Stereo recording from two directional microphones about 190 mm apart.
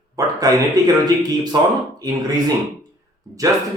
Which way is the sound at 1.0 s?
20° right (ahead or behind).